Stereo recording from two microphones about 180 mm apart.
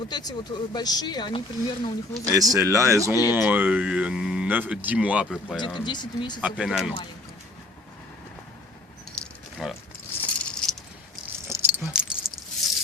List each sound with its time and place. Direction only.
0.1 s speech: 20° left (ahead or behind)
2.3 s speech: 20° right (ahead or behind); by 5.5 s centre (ahead or behind)
5.5 s speech: 25° left (ahead or behind)
6.4 s speech: 5° right (ahead or behind)
9.1 s a sound: centre (ahead or behind)
10.3 s rattle: 5° left (ahead or behind)
11.4 s keys jangling: 15° right (ahead or behind)